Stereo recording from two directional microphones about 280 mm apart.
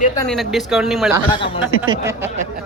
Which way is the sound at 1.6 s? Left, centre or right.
Centre.